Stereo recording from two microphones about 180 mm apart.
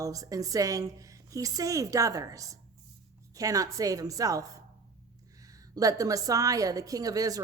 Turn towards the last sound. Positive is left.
turn(degrees=-20)  # may be behind; listen again after turning